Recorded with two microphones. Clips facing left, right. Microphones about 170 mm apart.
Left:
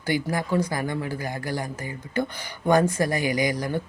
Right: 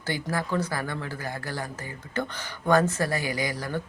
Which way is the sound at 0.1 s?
15° left (ahead or behind).